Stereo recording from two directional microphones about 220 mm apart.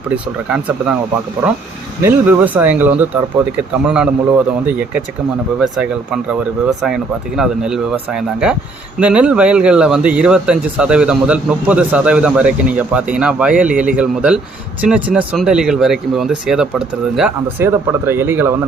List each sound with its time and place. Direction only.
2.0 s speech: 5° right (ahead or behind)